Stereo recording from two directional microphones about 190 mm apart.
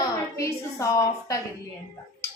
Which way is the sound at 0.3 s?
15° left (ahead or behind).